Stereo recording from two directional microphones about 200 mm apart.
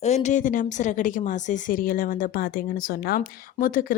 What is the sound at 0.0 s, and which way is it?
A woman's voice, 35° left (ahead or behind).